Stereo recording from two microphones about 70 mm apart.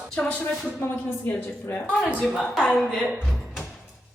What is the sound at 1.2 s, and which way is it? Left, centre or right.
Speech, left.